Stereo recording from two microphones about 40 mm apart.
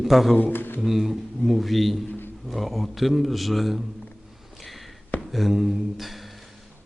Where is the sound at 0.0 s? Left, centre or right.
Centre.